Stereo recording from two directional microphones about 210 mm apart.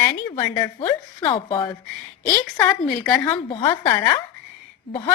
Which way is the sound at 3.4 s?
20° left (ahead or behind).